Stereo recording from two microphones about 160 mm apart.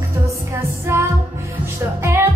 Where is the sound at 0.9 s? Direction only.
15° right (ahead or behind).